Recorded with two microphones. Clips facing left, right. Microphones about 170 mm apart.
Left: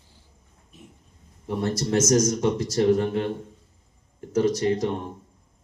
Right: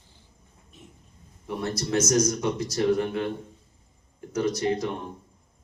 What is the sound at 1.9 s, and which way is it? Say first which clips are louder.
Speech: left 2 dB; 45° left (ahead or behind).